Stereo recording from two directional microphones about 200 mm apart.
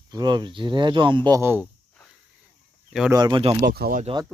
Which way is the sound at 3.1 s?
20° right (ahead or behind).